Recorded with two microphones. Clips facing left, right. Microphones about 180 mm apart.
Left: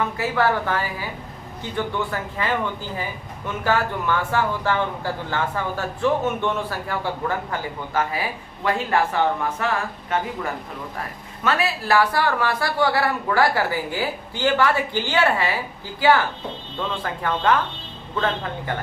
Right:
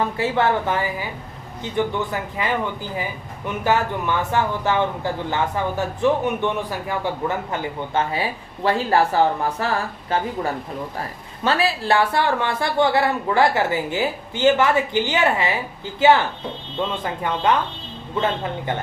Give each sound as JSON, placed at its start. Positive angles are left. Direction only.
{"t": 0.0, "sound": "speech", "side_deg": -25}